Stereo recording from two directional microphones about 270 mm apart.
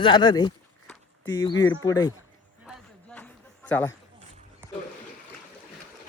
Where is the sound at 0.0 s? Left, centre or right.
Centre.